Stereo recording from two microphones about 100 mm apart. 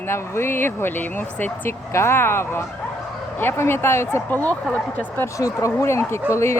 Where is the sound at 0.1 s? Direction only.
25° left (ahead or behind).